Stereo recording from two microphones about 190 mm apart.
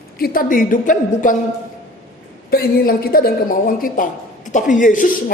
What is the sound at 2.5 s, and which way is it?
A woman's voice, 50° left (ahead or behind).